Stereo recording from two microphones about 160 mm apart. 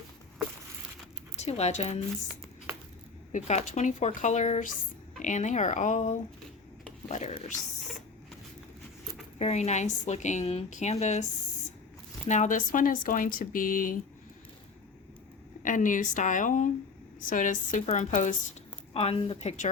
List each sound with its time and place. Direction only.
1.4 s speech: 40° left (ahead or behind)
3.3 s a woman's voice: 50° left (ahead or behind)
9.4 s a woman's voice: 45° left (ahead or behind)
12.3 s speech: 50° left (ahead or behind)
15.6 s a woman's voice: 55° left (ahead or behind)
18.9 s speech: 35° left (ahead or behind)